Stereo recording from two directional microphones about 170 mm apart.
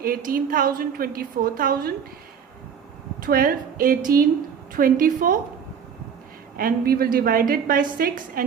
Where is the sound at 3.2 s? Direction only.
55° right (ahead or behind).